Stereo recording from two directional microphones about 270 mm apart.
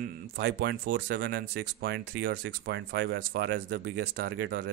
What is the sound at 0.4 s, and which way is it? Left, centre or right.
Speech, right.